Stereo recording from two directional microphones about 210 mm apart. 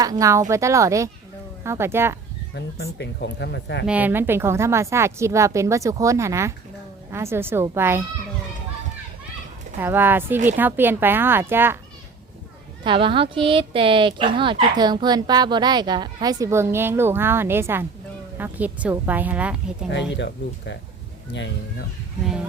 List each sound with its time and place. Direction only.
0.0 s a woman's voice: 15° right (ahead or behind)
2.6 s speech: 50° left (ahead or behind)
3.8 s a woman's voice: 5° right (ahead or behind)
9.8 s a woman's voice: 10° right (ahead or behind)
12.8 s a woman's voice: 25° right (ahead or behind); by 19.5 s 5° right (ahead or behind)
20.1 s speech: 55° left (ahead or behind)
22.2 s music: centre (ahead or behind)